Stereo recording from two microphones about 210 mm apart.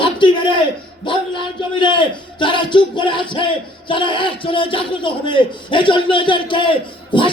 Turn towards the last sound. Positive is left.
turn(degrees=25)  # may be behind; listen again after turning